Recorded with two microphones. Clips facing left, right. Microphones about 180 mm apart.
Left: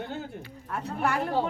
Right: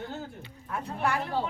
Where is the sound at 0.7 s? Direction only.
45° left (ahead or behind).